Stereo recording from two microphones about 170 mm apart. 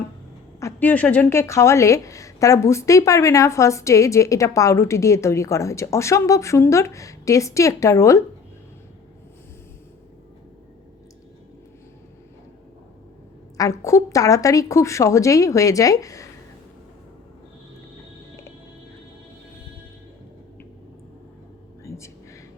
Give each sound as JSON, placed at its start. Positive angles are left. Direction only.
{"t": 0.6, "sound": "a woman's voice", "side_deg": 10}
{"t": 13.6, "sound": "a woman's voice", "side_deg": 20}
{"t": 21.8, "sound": "a sound", "side_deg": 15}